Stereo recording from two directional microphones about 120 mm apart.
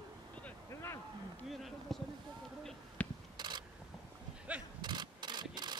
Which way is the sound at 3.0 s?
15° left (ahead or behind).